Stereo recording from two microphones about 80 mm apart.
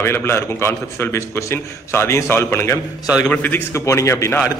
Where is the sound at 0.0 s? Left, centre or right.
Left.